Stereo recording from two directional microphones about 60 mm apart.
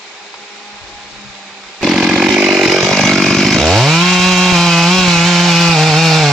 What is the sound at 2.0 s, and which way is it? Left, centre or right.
Chainsaw, centre.